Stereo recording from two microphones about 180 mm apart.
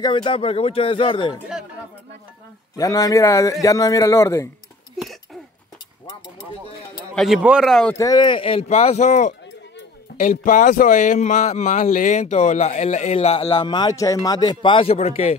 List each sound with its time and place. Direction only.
0.0 s speech: 25° left (ahead or behind)
2.8 s speech: 20° left (ahead or behind)
5.0 s a sound: centre (ahead or behind)
7.2 s speech: 5° right (ahead or behind)
7.9 s speech: 20° left (ahead or behind); by 15.3 s 35° left (ahead or behind)